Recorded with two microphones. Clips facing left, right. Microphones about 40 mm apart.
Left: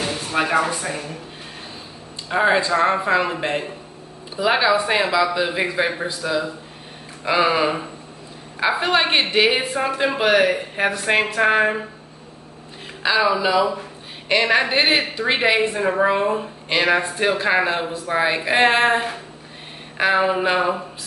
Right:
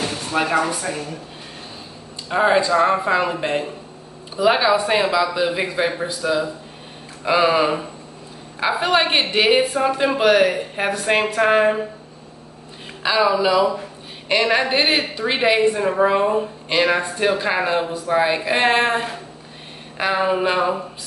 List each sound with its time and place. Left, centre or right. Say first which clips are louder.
0.0 s music: even; centre
0.5 s a woman's voice: even; centre
2.3 s a woman's voice: right 1 dB; centre
13.0 s a woman's voice: right 1 dB; centre